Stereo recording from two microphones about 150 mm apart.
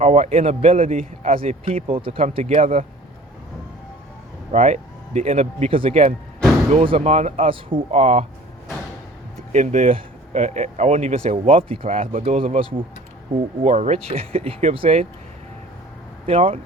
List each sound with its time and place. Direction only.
0.0 s a man's voice: 45° right (ahead or behind)
4.5 s speech: 50° right (ahead or behind)
9.5 s a man's voice: 50° right (ahead or behind)
16.2 s a man's voice: 40° right (ahead or behind)